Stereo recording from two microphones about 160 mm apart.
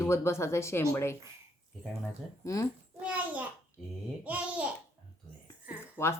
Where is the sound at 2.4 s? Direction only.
20° left (ahead or behind).